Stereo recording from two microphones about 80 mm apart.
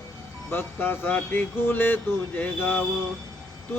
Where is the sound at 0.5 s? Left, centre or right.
Left.